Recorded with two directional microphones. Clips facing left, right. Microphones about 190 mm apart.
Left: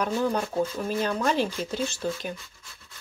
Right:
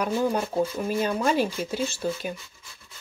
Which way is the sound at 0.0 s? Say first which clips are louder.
Right 1 dB; 10° right (ahead or behind).